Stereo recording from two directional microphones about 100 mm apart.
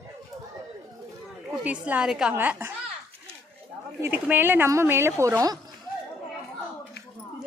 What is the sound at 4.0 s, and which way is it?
Speech, 20° right (ahead or behind).